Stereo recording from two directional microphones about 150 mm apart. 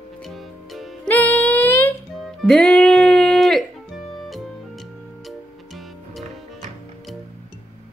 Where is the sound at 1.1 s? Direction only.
10° left (ahead or behind).